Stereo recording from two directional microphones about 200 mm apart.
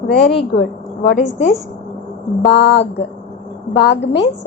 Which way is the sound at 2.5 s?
60° left (ahead or behind).